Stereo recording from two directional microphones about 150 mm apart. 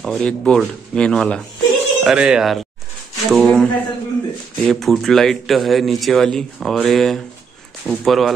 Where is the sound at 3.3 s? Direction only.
5° left (ahead or behind).